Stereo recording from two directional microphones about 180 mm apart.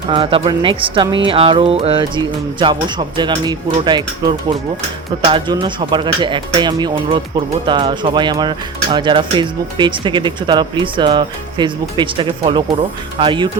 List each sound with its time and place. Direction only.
0.1 s speech: 30° right (ahead or behind)